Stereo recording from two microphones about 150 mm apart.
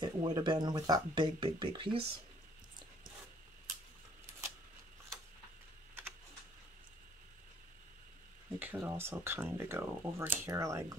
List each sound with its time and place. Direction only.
0.0 s speech: 30° right (ahead or behind)
8.5 s speech: 15° right (ahead or behind)